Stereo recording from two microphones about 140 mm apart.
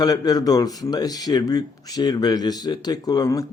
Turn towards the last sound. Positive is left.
turn(degrees=25)  # may be behind; listen again after turning